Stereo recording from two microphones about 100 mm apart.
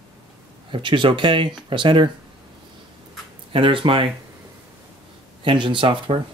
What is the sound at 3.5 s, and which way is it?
Speech, 60° right (ahead or behind).